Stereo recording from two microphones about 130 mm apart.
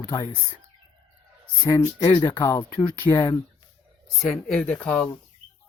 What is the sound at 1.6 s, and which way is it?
Speech, 30° left (ahead or behind).